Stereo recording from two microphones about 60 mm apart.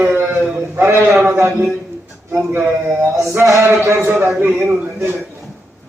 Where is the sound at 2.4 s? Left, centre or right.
Right.